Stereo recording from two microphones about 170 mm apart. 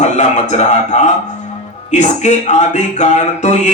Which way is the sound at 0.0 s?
45° left (ahead or behind).